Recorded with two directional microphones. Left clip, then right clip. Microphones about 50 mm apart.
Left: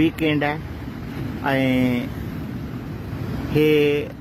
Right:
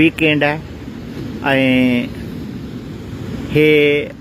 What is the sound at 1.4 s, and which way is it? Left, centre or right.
Speech, right.